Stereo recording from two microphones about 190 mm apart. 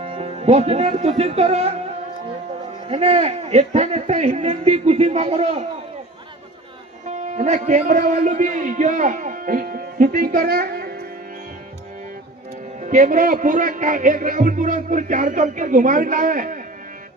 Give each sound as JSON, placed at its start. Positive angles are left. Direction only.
{"t": 0.0, "sound": "speech", "side_deg": -30}
{"t": 2.9, "sound": "a man's voice", "side_deg": -30}
{"t": 7.1, "sound": "a man's voice", "side_deg": -40}
{"t": 12.8, "sound": "a man's voice", "side_deg": -40}